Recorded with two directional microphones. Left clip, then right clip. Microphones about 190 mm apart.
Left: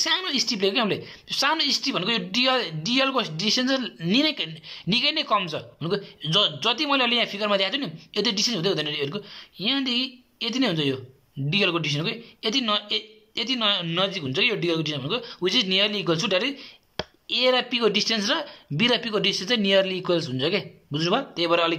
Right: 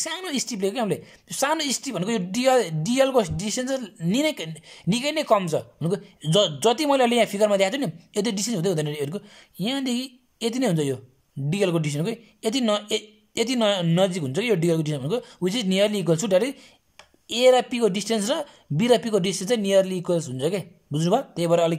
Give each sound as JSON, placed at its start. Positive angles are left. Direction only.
{"t": 0.0, "sound": "a woman's voice", "side_deg": -30}